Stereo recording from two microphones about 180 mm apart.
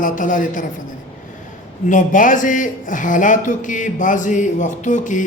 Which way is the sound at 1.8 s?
45° left (ahead or behind).